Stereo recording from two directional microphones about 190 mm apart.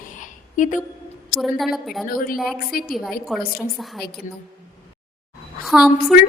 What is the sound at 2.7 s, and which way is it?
Speech, 50° left (ahead or behind).